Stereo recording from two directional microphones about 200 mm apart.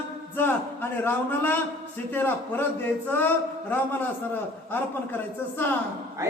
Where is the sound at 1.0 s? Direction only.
10° left (ahead or behind).